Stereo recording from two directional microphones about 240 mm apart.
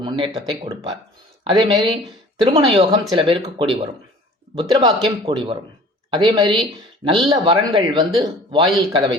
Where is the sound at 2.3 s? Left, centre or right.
Centre.